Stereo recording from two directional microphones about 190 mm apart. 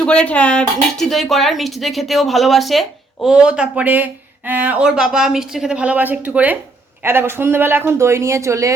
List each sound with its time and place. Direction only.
0.0 s speech: 5° left (ahead or behind); by 8.7 s 15° right (ahead or behind)